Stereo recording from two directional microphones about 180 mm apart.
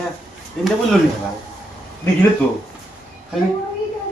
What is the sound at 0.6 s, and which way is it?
Speech, centre (ahead or behind).